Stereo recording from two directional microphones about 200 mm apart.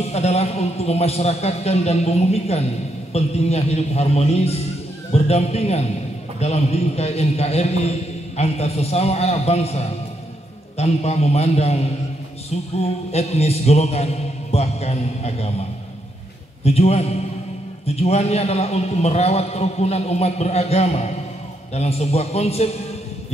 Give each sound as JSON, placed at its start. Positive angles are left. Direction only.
{"t": 0.0, "sound": "a man's voice", "side_deg": 30}
{"t": 16.6, "sound": "a man's voice", "side_deg": 30}